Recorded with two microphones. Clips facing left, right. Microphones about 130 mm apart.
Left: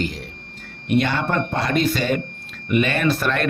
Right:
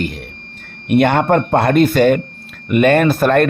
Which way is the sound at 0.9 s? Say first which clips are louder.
Right 8 dB; 60° right (ahead or behind).